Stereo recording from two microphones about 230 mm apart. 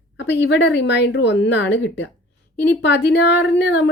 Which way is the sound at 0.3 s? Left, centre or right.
Left.